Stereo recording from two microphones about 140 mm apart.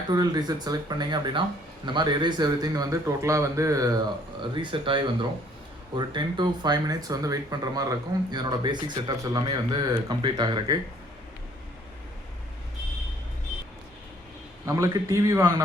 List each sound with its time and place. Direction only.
0.1 s speech: 30° right (ahead or behind)
4.5 s speech: 35° right (ahead or behind)
14.7 s speech: 25° right (ahead or behind)